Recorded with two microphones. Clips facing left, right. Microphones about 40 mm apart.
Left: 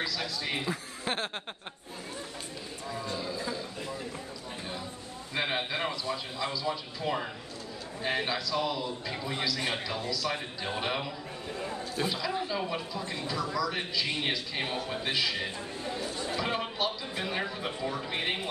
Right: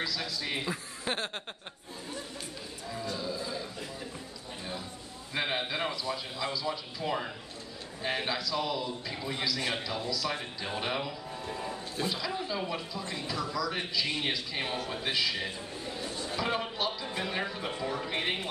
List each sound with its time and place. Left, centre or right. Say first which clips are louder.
0.0 s a man's voice: left 1 dB; centre
5.3 s a man's voice: left 1 dB; centre
16.0 s chatter: left 1 dB; left
16.3 s a man's voice: right 1 dB; centre